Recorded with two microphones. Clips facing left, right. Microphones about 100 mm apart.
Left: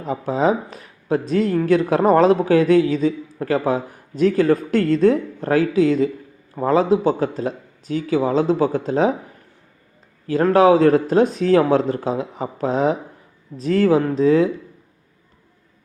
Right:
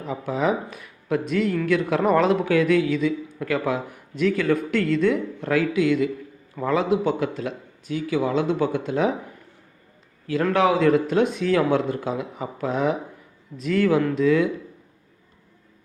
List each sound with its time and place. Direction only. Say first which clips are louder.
0.0 s speech: left 5 dB; 30° left (ahead or behind)
10.2 s speech: left 6 dB; 40° left (ahead or behind)